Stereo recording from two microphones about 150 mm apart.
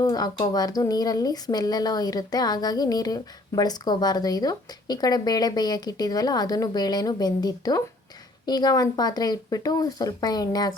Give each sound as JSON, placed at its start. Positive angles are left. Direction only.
{"t": 0.0, "sound": "speech", "side_deg": 25}